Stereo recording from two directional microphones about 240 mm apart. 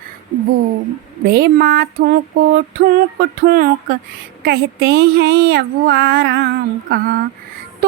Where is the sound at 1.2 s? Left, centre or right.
Right.